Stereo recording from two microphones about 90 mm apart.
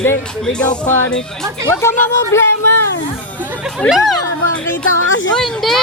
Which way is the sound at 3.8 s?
15° left (ahead or behind).